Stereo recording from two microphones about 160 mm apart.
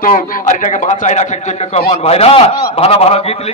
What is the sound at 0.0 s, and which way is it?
A man's voice, 60° left (ahead or behind).